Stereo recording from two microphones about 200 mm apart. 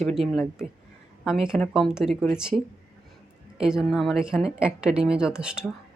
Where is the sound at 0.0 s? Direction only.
Centre (ahead or behind).